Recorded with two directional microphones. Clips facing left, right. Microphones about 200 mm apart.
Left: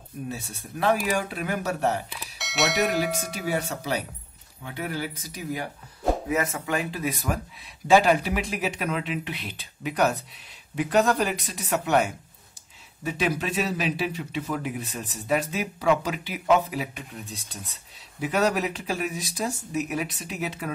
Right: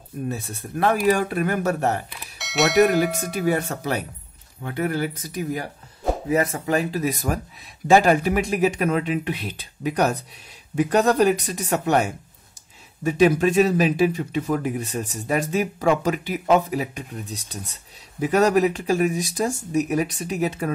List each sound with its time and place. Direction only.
0.3 s speech: 55° right (ahead or behind)
2.1 s speech: centre (ahead or behind)
3.4 s speech: 55° right (ahead or behind)
6.2 s speech: 35° right (ahead or behind)